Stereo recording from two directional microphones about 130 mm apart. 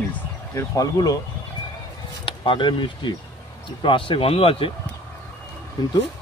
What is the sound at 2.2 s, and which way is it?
Speech, 40° left (ahead or behind).